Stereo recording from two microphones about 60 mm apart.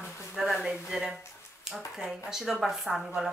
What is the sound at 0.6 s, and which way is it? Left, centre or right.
Speech, centre.